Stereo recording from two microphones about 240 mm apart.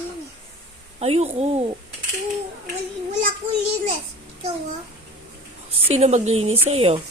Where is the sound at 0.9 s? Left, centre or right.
Right.